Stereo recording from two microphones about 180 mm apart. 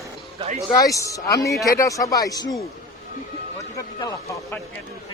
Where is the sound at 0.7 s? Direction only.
20° left (ahead or behind).